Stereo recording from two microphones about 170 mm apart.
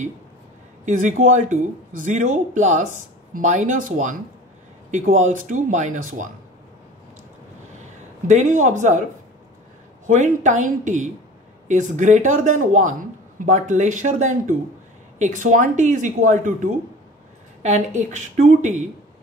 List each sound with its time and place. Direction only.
0.8 s speech: 45° right (ahead or behind)
8.3 s speech: 45° right (ahead or behind)
10.0 s speech: 45° right (ahead or behind)